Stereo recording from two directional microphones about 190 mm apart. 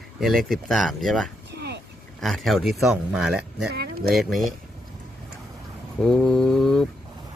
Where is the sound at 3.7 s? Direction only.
60° right (ahead or behind).